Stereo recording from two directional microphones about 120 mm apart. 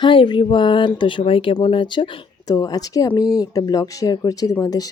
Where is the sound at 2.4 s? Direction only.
30° left (ahead or behind).